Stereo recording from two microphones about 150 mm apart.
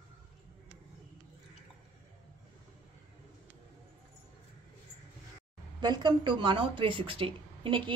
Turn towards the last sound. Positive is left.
turn(degrees=-35)  # may be behind; listen again after turning